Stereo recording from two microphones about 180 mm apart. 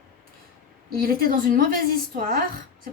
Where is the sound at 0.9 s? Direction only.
55° right (ahead or behind).